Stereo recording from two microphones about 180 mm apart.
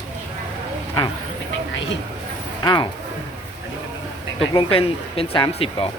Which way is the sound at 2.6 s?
25° left (ahead or behind).